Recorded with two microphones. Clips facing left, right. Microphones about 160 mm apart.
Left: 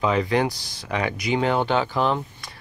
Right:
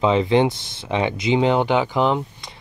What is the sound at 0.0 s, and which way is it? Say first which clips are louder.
Speech: right 4 dB; 25° right (ahead or behind).